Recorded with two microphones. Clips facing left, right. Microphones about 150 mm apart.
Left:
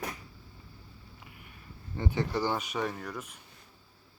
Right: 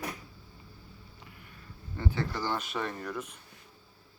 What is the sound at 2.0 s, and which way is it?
Speech, 15° left (ahead or behind).